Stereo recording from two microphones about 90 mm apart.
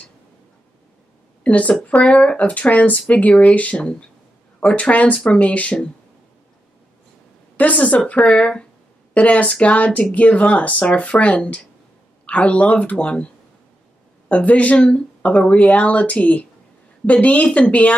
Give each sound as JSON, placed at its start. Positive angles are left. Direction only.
{"t": 1.4, "sound": "speech", "side_deg": 15}
{"t": 7.5, "sound": "speech", "side_deg": 15}
{"t": 14.3, "sound": "speech", "side_deg": 15}